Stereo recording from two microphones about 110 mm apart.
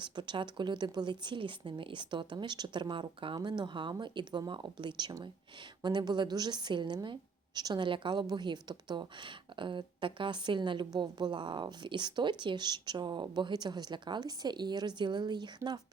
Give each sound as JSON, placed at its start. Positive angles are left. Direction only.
{"t": 0.0, "sound": "speech", "side_deg": -45}